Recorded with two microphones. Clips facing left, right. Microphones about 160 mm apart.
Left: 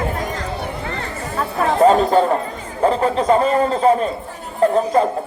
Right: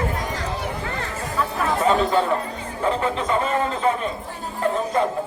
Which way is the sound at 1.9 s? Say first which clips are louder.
Left 5 dB; 40° left (ahead or behind).